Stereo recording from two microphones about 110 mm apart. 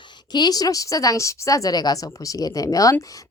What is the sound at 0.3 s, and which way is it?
A woman's voice, 35° left (ahead or behind).